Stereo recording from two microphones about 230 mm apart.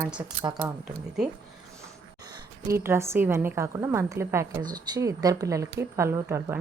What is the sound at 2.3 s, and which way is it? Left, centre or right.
Speech, centre.